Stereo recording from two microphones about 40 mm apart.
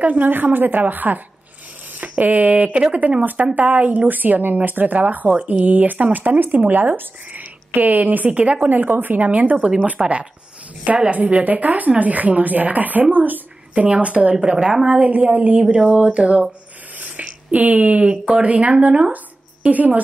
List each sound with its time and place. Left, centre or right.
0.0 s speech: right
8.3 s speech: right
8.6 s speech: right
9.6 s speech: right
14.0 s speech: right
15.3 s speech: right